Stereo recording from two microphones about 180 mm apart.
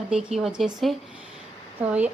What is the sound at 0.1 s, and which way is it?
A woman's voice, 5° right (ahead or behind).